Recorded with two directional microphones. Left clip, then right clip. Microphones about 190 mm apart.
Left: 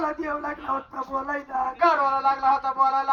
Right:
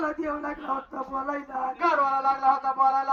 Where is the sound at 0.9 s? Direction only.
40° right (ahead or behind).